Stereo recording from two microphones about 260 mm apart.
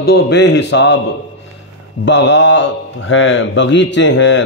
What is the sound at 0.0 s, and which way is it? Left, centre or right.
Speech, left.